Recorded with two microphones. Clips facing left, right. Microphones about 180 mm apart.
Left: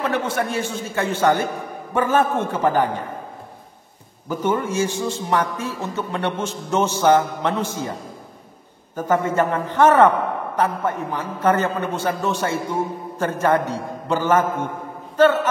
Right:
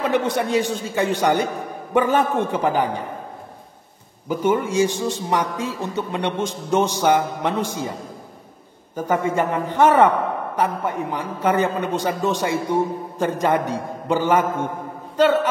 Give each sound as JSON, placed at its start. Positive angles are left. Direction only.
{"t": 0.1, "sound": "a man's voice", "side_deg": -15}
{"t": 4.3, "sound": "a man's voice", "side_deg": -10}
{"t": 8.9, "sound": "a man's voice", "side_deg": -15}